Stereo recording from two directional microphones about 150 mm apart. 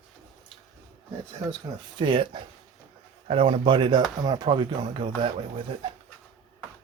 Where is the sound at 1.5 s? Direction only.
30° right (ahead or behind).